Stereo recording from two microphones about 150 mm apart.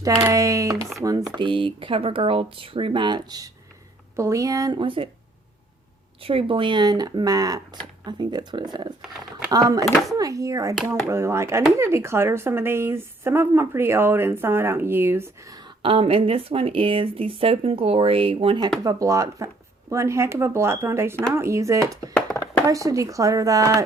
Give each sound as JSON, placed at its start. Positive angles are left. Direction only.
{"t": 0.3, "sound": "speech", "side_deg": -20}
{"t": 1.4, "sound": "speech", "side_deg": -35}
{"t": 4.8, "sound": "speech", "side_deg": -35}
{"t": 6.2, "sound": "speech", "side_deg": -35}
{"t": 15.8, "sound": "speech", "side_deg": -40}
{"t": 18.8, "sound": "speech", "side_deg": -25}